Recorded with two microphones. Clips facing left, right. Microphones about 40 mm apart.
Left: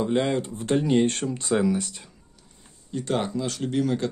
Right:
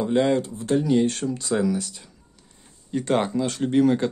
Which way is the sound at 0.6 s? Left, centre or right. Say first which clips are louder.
Left 3 dB; left.